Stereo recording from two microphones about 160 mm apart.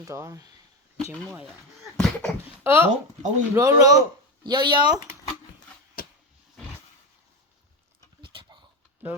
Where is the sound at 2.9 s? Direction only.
50° right (ahead or behind).